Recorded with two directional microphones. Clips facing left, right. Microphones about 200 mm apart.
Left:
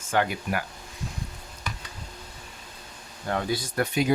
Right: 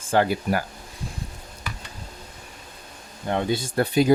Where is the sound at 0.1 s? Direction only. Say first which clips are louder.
Right 5 dB; 35° right (ahead or behind).